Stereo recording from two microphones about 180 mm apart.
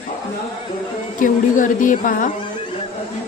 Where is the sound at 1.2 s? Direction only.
45° left (ahead or behind).